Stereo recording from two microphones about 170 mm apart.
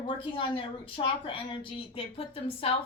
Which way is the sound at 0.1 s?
30° left (ahead or behind).